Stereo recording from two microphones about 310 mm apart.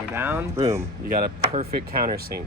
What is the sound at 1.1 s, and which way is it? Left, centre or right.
Speech, right.